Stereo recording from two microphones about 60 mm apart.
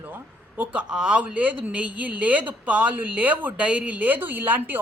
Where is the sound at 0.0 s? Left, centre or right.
Right.